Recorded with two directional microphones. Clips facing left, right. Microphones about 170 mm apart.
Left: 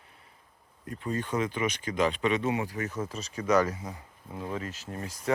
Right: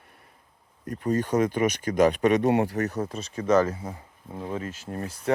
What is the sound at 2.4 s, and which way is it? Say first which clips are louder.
Speech: right 7 dB; 65° right (ahead or behind).